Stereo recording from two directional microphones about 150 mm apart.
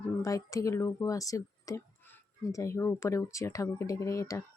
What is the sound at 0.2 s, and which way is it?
Speech, 20° left (ahead or behind).